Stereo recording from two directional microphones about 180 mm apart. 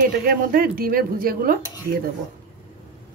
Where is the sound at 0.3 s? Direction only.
55° right (ahead or behind).